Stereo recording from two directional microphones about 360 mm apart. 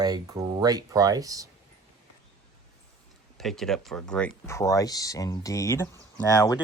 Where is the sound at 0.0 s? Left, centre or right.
Centre.